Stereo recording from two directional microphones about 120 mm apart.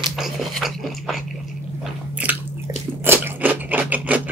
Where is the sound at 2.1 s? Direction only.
15° right (ahead or behind).